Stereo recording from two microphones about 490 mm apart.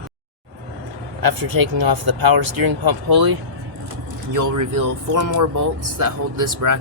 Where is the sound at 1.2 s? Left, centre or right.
Right.